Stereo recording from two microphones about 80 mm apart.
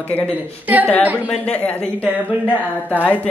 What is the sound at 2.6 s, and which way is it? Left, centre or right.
Speech, centre.